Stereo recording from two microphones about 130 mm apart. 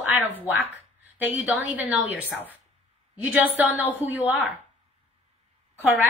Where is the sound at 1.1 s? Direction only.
15° right (ahead or behind).